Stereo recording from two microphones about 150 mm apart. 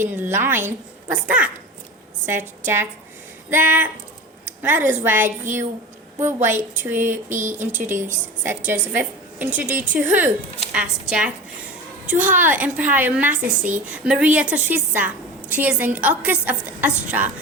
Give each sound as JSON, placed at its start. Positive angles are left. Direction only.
{"t": 0.0, "sound": "a woman's voice", "side_deg": -15}
{"t": 4.4, "sound": "a sound", "side_deg": -10}
{"t": 5.0, "sound": "a woman's voice", "side_deg": -15}